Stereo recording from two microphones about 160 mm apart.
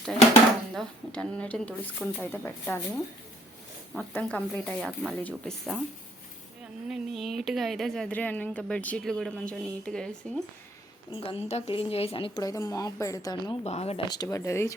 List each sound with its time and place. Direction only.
0.7 s a woman's voice: 5° left (ahead or behind)
6.8 s a woman's voice: centre (ahead or behind)
11.1 s speech: 35° left (ahead or behind)
13.7 s speech: 40° left (ahead or behind)
14.1 s speech: 25° left (ahead or behind)